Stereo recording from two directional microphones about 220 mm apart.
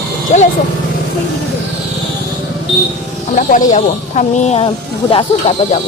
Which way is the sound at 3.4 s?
35° left (ahead or behind).